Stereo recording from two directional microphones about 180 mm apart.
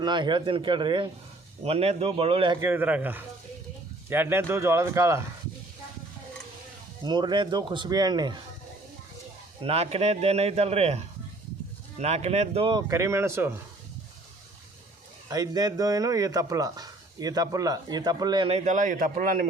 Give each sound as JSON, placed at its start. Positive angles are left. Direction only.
{"t": 0.0, "sound": "a man's voice", "side_deg": -25}
{"t": 2.6, "sound": "speech", "side_deg": -10}
{"t": 7.0, "sound": "speech", "side_deg": -25}
{"t": 9.6, "sound": "a man's voice", "side_deg": -35}
{"t": 12.9, "sound": "speech", "side_deg": -15}
{"t": 15.3, "sound": "speech", "side_deg": -20}